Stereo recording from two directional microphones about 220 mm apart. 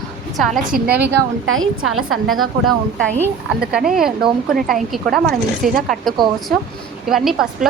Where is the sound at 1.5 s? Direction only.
65° right (ahead or behind).